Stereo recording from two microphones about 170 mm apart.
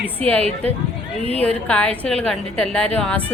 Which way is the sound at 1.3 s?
10° left (ahead or behind).